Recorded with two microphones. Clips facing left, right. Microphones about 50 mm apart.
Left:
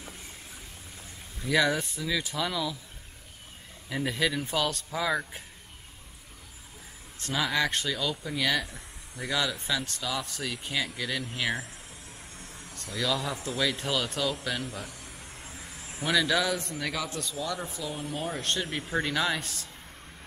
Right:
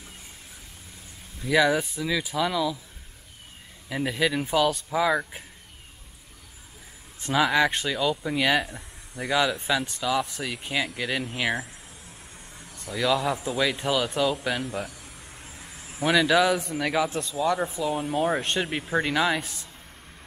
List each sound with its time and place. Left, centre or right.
1.4 s speech: centre
3.9 s speech: centre
7.2 s speech: centre
12.7 s speech: centre
16.9 s speech: right
17.2 s speech: centre
17.5 s speech: right
18.4 s speech: centre